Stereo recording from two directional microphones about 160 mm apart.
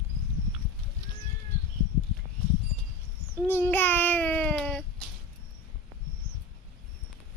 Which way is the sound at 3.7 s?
10° left (ahead or behind).